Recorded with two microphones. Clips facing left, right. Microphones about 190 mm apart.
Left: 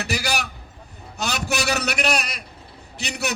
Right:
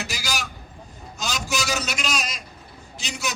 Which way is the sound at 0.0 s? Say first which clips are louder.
Left 5 dB; 60° left (ahead or behind).